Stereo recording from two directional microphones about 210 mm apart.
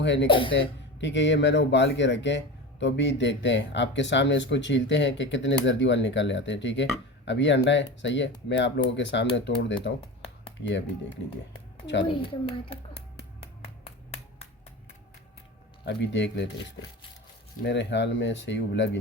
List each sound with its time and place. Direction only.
0.0 s speech: 60° left (ahead or behind)
0.3 s a child's voice: 25° left (ahead or behind)
1.0 s speech: 60° left (ahead or behind)
12.0 s a child's voice: 25° left (ahead or behind)
13.8 s finger snapping: 30° left (ahead or behind)
15.8 s speech: 55° left (ahead or behind)
17.6 s speech: 55° left (ahead or behind)